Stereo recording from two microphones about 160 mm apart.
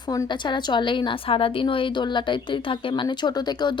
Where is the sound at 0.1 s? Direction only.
25° left (ahead or behind).